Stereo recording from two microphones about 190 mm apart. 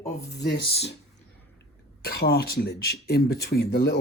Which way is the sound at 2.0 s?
55° left (ahead or behind).